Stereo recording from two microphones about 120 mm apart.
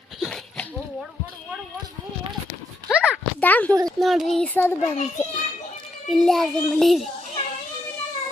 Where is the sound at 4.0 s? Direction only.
Centre (ahead or behind).